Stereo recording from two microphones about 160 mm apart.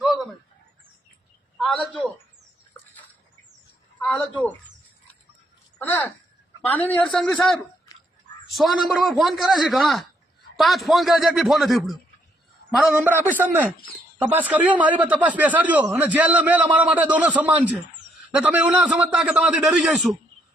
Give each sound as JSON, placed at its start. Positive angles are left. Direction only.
{"t": 1.5, "sound": "a man's voice", "side_deg": 0}
{"t": 3.9, "sound": "a man's voice", "side_deg": 10}
{"t": 5.8, "sound": "a man's voice", "side_deg": 10}